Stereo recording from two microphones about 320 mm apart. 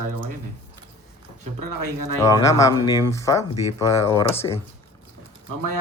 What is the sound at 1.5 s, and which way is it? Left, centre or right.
Speech, right.